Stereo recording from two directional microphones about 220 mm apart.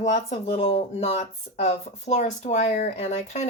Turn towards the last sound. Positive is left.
turn(degrees=30)  # may be behind; listen again after turning